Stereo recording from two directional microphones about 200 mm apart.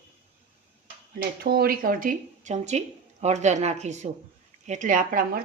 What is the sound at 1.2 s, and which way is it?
Speech, 50° right (ahead or behind).